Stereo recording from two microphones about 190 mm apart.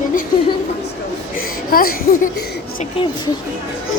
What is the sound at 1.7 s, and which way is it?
Speech, 50° left (ahead or behind).